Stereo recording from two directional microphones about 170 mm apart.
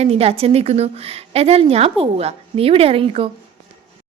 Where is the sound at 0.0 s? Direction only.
35° right (ahead or behind).